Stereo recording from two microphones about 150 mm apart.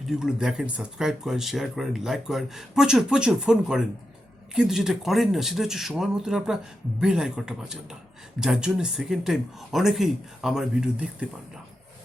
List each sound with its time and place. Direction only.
0.1 s speech: 5° right (ahead or behind)